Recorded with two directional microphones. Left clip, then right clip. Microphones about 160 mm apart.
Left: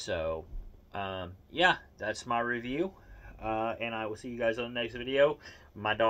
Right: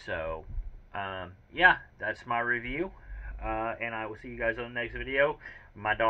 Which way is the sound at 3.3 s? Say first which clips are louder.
Even; 25° left (ahead or behind).